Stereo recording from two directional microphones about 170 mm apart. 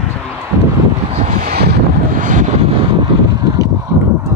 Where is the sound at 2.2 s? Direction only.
45° right (ahead or behind); by 3.6 s 25° right (ahead or behind).